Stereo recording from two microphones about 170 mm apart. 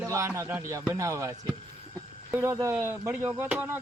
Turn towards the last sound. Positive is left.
turn(degrees=-10)  # may be behind; listen again after turning